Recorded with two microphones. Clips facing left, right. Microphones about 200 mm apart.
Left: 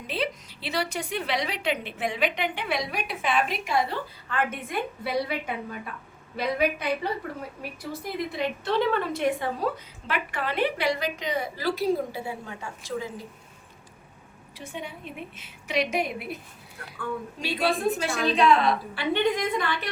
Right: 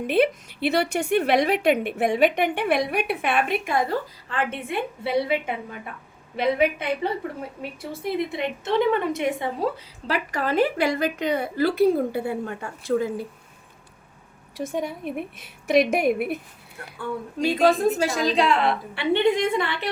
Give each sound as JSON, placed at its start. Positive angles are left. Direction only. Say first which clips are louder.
{"t": 0.1, "sound": "a woman's voice", "louder": "right 9 dB", "side_deg": -55}
{"t": 4.3, "sound": "a woman's voice", "louder": "right 2 dB", "side_deg": -30}
{"t": 14.6, "sound": "a woman's voice", "louder": "right 10 dB", "side_deg": -45}
{"t": 17.4, "sound": "a woman's voice", "louder": "right 7 dB", "side_deg": -45}
{"t": 18.3, "sound": "a woman's voice", "louder": "left 3 dB", "side_deg": -30}